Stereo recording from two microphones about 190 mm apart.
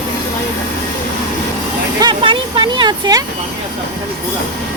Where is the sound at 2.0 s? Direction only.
25° right (ahead or behind).